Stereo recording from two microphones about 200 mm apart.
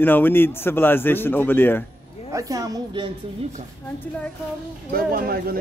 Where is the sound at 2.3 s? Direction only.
15° right (ahead or behind).